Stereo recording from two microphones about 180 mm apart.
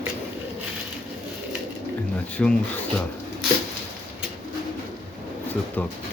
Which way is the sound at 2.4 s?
5° left (ahead or behind).